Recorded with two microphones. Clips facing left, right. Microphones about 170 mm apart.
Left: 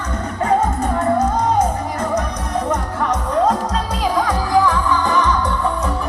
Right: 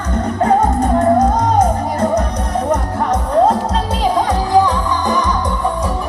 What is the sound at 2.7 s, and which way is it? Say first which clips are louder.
Music: right 3 dB; 35° right (ahead or behind).